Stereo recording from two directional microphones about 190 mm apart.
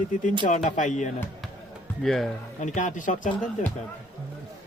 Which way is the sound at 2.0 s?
Centre (ahead or behind).